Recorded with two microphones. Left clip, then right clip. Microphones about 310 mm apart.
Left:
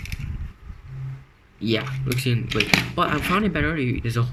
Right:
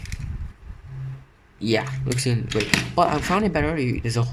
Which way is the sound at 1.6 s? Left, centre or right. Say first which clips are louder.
Right 2 dB; centre.